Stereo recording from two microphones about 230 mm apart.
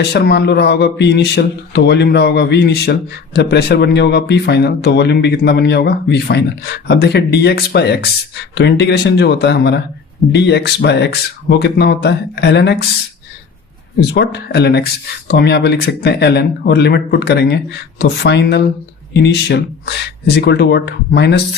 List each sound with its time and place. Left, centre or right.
0.0 s speech: left
14.0 s speech: left